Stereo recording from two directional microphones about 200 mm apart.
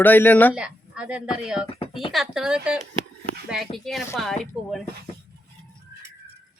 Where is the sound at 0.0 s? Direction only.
10° left (ahead or behind).